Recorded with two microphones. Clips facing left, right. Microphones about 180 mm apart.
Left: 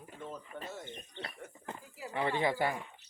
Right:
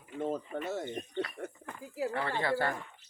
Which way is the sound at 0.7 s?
70° right (ahead or behind).